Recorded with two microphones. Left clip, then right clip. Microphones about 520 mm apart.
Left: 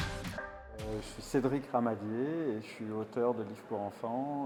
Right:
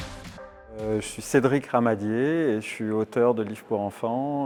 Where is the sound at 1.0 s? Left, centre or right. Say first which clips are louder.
Right 10 dB; right.